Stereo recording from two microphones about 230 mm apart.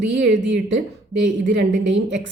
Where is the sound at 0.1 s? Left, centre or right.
Right.